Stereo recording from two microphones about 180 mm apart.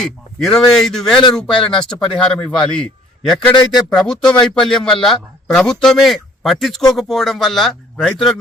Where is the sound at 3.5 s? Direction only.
25° left (ahead or behind).